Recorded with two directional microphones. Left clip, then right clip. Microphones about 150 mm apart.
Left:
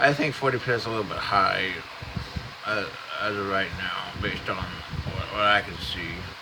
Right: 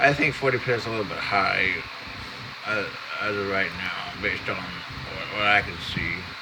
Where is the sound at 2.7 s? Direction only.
20° left (ahead or behind).